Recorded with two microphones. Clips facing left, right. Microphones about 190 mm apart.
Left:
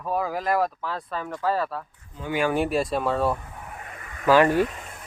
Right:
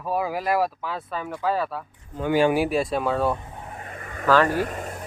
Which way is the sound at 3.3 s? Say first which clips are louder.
Right 2 dB; 25° right (ahead or behind).